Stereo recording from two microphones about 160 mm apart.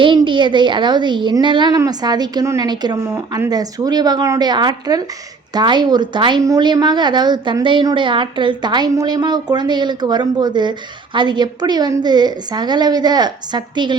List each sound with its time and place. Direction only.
0.0 s a woman's voice: 30° right (ahead or behind)